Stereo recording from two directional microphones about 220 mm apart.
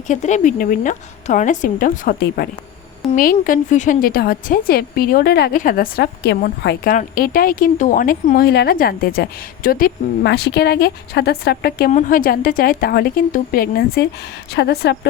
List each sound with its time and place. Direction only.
0.1 s a woman's voice: 30° left (ahead or behind); by 14.9 s 50° left (ahead or behind)